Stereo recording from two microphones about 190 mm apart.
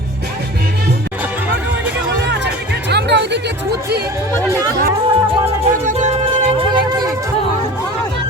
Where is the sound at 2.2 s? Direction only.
65° right (ahead or behind).